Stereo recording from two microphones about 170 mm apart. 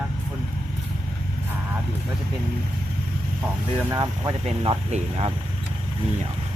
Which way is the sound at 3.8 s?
20° right (ahead or behind).